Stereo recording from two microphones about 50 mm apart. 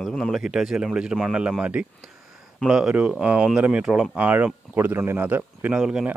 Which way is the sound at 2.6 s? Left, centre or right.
Centre.